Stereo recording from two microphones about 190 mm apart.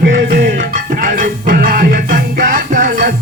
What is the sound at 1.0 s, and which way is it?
Music, 45° right (ahead or behind).